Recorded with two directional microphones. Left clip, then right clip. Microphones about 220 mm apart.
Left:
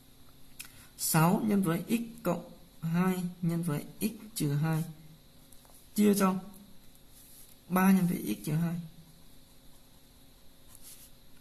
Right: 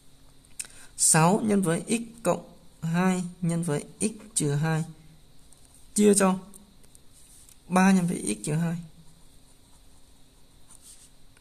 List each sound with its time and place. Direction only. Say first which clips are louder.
0.6 s speech: right 10 dB; 50° right (ahead or behind)
5.9 s speech: right 7 dB; 50° right (ahead or behind)
7.7 s speech: right 5 dB; 50° right (ahead or behind)